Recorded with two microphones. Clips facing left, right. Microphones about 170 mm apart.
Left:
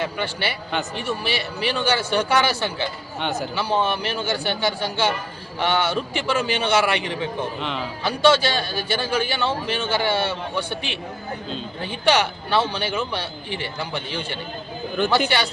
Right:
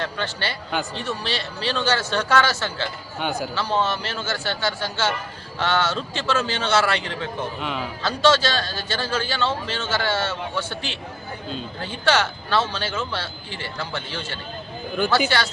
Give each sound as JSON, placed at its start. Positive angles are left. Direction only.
{"t": 0.0, "sound": "a man's voice", "side_deg": 15}
{"t": 3.2, "sound": "speech", "side_deg": -5}
{"t": 3.5, "sound": "a man's voice", "side_deg": 15}